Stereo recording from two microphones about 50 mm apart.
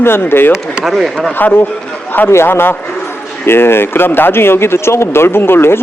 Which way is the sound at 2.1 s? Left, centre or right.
Left.